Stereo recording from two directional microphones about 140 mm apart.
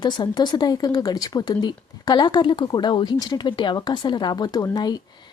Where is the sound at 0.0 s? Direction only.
30° left (ahead or behind).